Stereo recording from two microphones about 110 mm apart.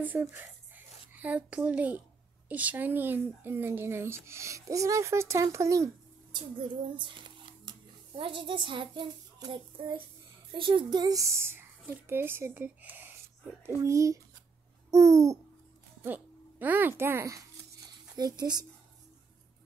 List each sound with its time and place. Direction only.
0.0 s a child's voice: 20° right (ahead or behind)
6.3 s a child's voice: 50° right (ahead or behind); by 13.2 s 15° right (ahead or behind)
13.7 s speech: 25° right (ahead or behind)
14.9 s babbling: 30° right (ahead or behind)
16.0 s a sound: 15° right (ahead or behind)
18.1 s a woman's voice: 40° right (ahead or behind)